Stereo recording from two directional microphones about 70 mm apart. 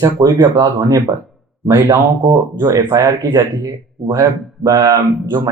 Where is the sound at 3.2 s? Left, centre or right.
Right.